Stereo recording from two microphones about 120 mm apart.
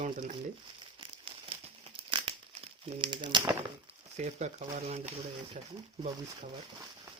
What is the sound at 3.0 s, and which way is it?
Speech, 40° right (ahead or behind).